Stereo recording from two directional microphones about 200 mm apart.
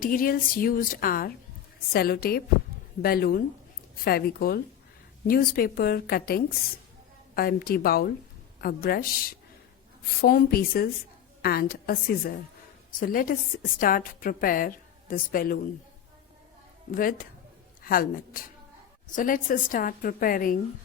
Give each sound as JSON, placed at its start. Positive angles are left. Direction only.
{"t": 0.0, "sound": "a woman's voice", "side_deg": 45}
{"t": 16.9, "sound": "a woman's voice", "side_deg": 45}